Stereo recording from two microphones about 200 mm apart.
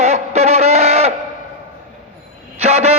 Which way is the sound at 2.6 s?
30° right (ahead or behind).